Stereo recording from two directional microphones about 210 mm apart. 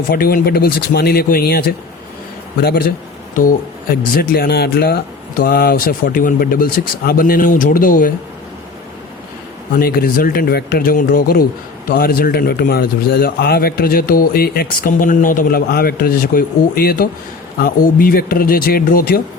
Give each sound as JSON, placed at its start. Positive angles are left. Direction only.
{"t": 0.1, "sound": "a man's voice", "side_deg": 45}
{"t": 9.7, "sound": "a man's voice", "side_deg": 45}